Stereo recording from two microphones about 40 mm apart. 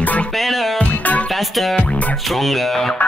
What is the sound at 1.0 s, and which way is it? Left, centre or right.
Music, left.